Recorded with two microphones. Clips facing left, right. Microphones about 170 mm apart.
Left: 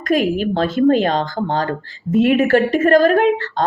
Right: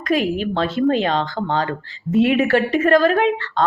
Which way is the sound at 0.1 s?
45° left (ahead or behind).